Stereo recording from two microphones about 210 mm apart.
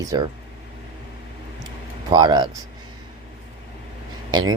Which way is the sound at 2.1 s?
20° right (ahead or behind).